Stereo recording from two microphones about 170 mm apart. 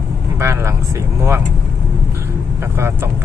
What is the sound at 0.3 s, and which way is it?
Speech, 15° right (ahead or behind).